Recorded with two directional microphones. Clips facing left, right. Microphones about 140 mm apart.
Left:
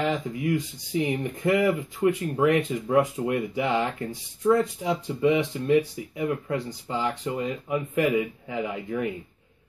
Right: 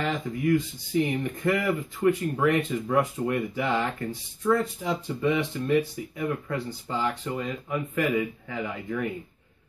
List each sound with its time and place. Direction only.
0.0 s speech: 15° left (ahead or behind)